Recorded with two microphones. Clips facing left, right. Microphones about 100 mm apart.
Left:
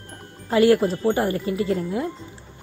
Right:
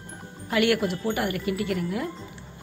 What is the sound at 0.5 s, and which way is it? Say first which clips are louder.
A woman's voice: left 6 dB; 30° left (ahead or behind).